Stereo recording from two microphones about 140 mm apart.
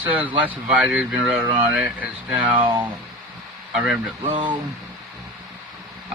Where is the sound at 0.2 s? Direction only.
10° right (ahead or behind).